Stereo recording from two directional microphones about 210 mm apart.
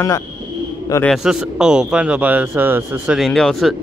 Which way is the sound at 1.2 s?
5° right (ahead or behind).